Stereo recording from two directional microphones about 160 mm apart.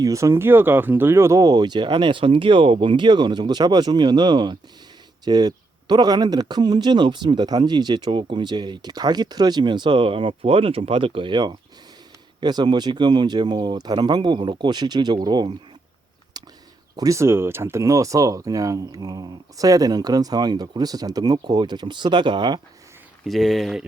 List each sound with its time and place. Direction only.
0.0 s speech: 20° right (ahead or behind)
16.4 s a sound: 25° right (ahead or behind)
17.0 s speech: 20° right (ahead or behind)
23.2 s speech: centre (ahead or behind)